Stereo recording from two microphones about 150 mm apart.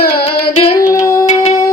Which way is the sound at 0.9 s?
20° left (ahead or behind).